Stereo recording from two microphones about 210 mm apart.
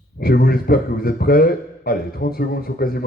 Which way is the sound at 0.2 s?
45° left (ahead or behind).